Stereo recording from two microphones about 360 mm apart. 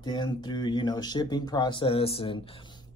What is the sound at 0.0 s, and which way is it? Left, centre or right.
Speech, centre.